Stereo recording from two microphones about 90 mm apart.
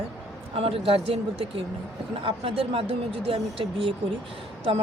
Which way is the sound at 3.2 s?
80° right.